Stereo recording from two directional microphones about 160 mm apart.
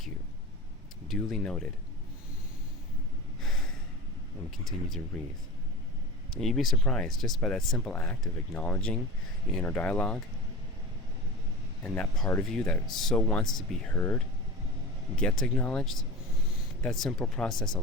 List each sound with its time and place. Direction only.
1.0 s speech: centre (ahead or behind)
4.5 s speech: centre (ahead or behind)
6.3 s speech: centre (ahead or behind)
11.8 s speech: 5° left (ahead or behind)